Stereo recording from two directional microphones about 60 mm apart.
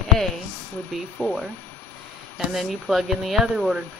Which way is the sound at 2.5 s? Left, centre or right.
Centre.